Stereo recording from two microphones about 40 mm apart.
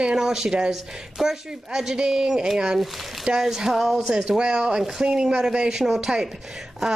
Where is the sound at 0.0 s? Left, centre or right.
Centre.